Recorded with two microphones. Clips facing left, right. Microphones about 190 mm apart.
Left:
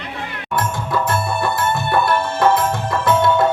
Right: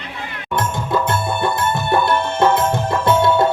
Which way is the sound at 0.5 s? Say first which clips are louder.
Right 1 dB; 25° right (ahead or behind).